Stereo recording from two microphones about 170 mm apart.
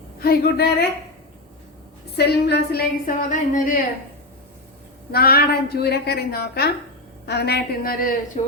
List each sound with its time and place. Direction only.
0.2 s a woman's voice: 65° left (ahead or behind)
2.1 s a woman's voice: 75° left (ahead or behind); by 3.8 s 50° left (ahead or behind)
5.1 s a woman's voice: 65° left (ahead or behind)
8.4 s speech: 40° left (ahead or behind)